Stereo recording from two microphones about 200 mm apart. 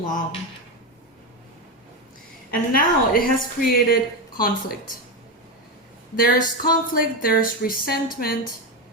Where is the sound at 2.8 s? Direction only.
45° left (ahead or behind).